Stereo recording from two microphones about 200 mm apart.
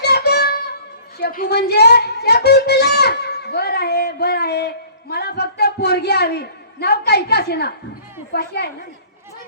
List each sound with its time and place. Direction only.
0.0 s music: 55° left (ahead or behind)
1.2 s a woman's voice: 50° left (ahead or behind)